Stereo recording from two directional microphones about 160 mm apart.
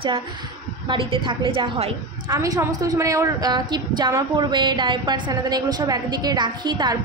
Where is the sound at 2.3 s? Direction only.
20° right (ahead or behind).